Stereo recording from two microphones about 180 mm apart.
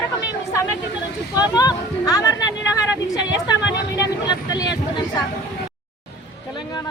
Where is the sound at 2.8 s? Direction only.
20° left (ahead or behind).